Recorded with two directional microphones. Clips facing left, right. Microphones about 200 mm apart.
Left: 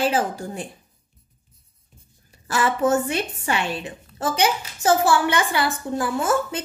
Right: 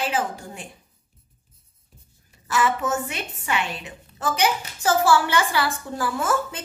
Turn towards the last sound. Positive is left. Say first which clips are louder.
# left 3 dB
turn(degrees=20)  # may be behind; listen again after turning